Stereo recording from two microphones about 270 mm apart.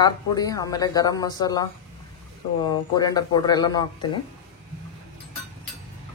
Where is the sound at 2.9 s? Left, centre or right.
Centre.